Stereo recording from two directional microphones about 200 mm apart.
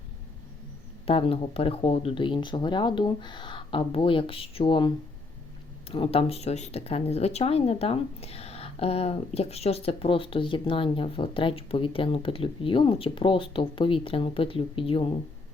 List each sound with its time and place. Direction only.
1.0 s speech: 30° left (ahead or behind)
5.9 s speech: 30° left (ahead or behind)